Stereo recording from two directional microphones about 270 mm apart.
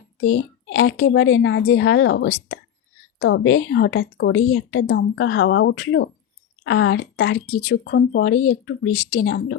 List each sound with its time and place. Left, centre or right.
0.2 s speech: left